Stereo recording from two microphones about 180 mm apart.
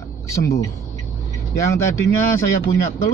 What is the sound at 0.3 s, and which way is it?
A man's voice, 15° left (ahead or behind).